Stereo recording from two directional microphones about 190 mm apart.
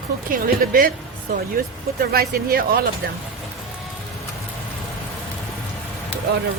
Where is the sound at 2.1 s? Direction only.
50° right (ahead or behind).